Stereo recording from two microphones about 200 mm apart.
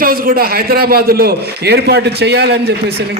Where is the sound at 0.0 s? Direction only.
45° right (ahead or behind).